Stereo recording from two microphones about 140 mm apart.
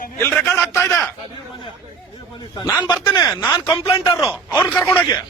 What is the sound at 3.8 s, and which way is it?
Speech, 40° left (ahead or behind).